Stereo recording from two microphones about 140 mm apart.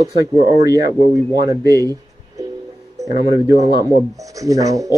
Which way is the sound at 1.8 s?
25° right (ahead or behind).